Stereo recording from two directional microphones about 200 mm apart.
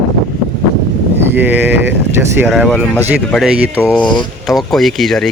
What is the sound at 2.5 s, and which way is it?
Speech, centre (ahead or behind).